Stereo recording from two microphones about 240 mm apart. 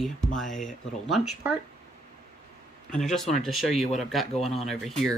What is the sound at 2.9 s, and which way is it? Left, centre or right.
Speech, centre.